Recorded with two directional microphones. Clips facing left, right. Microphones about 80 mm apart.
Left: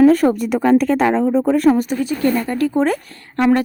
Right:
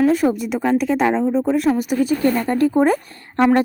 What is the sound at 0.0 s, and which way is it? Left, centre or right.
Speech, centre.